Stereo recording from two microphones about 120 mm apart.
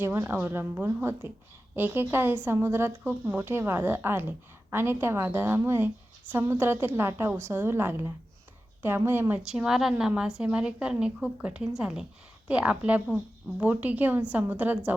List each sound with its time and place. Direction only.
0.0 s a woman's voice: 20° right (ahead or behind)
9.5 s a woman's voice: 5° right (ahead or behind)